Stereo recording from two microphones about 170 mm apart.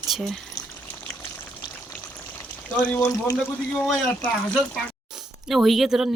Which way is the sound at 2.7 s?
15° left (ahead or behind).